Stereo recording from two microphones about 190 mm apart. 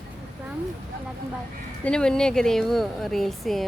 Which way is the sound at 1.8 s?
5° left (ahead or behind).